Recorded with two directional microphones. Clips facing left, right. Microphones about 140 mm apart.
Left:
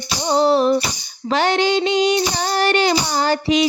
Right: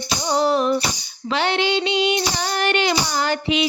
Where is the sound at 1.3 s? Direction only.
40° left (ahead or behind).